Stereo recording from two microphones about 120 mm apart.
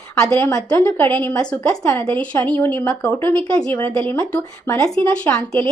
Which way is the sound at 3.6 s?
20° left (ahead or behind).